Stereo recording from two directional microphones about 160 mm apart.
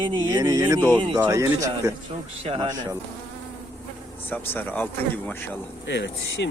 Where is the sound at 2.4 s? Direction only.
35° right (ahead or behind).